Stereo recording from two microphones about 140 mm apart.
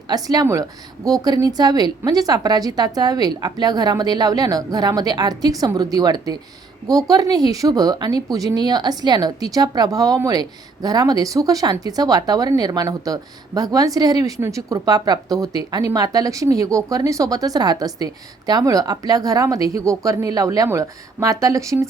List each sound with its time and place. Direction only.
0.1 s speech: 25° right (ahead or behind)